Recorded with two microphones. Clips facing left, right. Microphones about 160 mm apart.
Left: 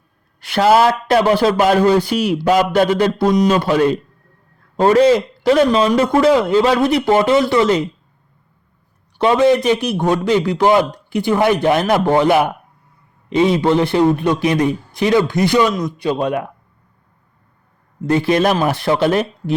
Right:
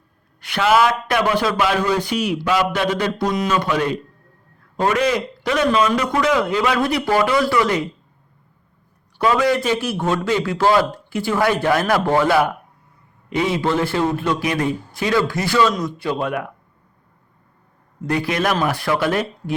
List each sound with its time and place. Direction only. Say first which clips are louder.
0.4 s a man's voice: left 4 dB; 35° left (ahead or behind)
9.1 s a man's voice: left 5 dB; 25° left (ahead or behind)
18.0 s a man's voice: left 6 dB; 25° left (ahead or behind)